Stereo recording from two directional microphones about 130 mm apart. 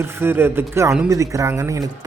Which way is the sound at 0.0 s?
15° right (ahead or behind).